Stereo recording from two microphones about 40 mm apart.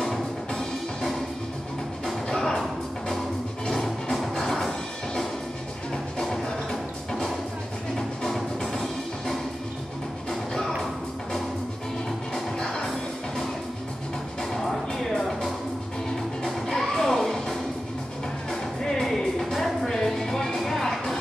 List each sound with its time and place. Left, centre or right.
0.0 s music: centre
2.2 s music: centre
3.6 s music: centre
8.2 s music: centre
10.5 s music: centre
12.5 s music: centre
14.5 s music: centre